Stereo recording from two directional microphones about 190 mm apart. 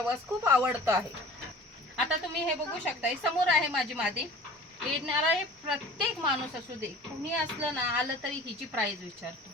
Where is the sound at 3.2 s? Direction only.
5° right (ahead or behind).